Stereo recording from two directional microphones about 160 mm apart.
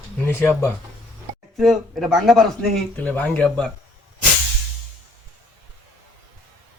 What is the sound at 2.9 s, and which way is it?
Speech, 10° left (ahead or behind).